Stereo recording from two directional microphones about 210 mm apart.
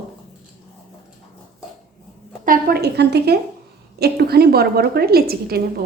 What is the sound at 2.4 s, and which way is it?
A woman's voice, 45° right (ahead or behind).